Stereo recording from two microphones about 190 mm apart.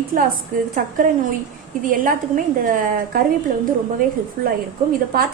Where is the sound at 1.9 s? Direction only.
45° right (ahead or behind).